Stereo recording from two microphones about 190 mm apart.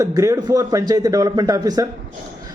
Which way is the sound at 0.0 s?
15° right (ahead or behind).